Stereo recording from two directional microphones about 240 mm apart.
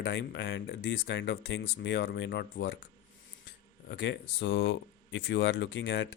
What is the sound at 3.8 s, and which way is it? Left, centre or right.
Speech, left.